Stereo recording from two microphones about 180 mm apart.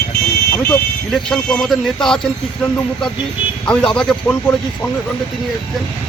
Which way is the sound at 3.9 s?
10° left (ahead or behind).